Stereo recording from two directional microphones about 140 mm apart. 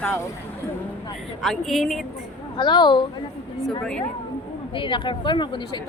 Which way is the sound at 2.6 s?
30° left (ahead or behind).